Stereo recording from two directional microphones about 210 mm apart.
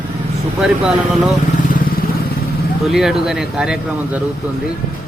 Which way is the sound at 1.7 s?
45° left (ahead or behind).